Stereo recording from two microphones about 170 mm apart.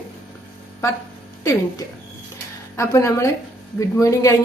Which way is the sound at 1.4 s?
20° left (ahead or behind).